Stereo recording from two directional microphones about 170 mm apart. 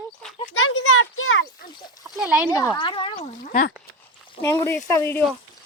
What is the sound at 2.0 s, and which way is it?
Speech, 5° right (ahead or behind).